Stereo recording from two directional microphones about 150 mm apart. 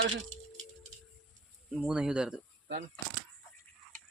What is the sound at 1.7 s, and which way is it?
Speech, 5° right (ahead or behind).